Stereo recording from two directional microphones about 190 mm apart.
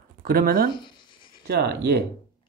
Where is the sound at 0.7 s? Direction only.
25° left (ahead or behind).